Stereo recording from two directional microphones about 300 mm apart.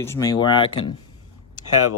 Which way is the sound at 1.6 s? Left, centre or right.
Left.